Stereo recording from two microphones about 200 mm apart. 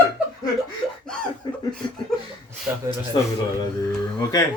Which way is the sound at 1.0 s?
5° left (ahead or behind).